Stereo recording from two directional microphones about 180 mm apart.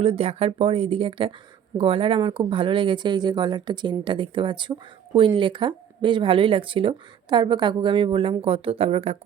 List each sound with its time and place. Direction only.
0.0 s speech: 35° right (ahead or behind)